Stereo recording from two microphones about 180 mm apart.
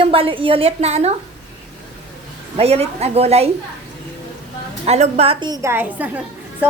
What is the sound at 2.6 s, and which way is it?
Speech, 35° right (ahead or behind).